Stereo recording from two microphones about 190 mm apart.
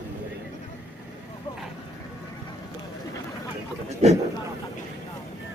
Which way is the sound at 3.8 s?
35° right (ahead or behind).